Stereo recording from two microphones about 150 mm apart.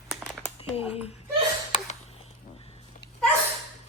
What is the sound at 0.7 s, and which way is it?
Speech, 40° left (ahead or behind).